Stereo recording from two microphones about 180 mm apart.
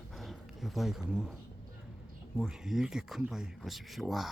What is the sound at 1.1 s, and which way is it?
Speech, 5° right (ahead or behind).